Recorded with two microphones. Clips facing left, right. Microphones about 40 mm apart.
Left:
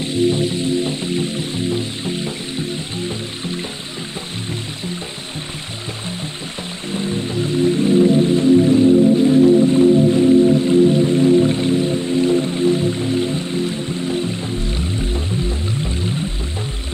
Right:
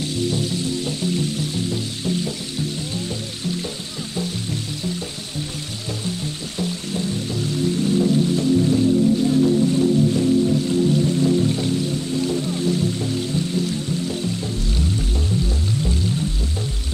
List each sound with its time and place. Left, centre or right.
0.0 s music: left
6.6 s music: left